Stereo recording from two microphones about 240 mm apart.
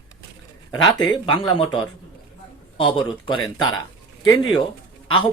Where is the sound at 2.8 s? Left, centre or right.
Centre.